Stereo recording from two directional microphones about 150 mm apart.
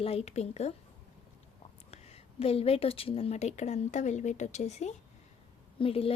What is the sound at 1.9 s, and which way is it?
Speech, 40° left (ahead or behind).